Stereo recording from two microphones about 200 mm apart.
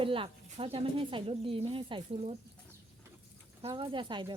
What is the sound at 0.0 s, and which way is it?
Speech, 25° right (ahead or behind).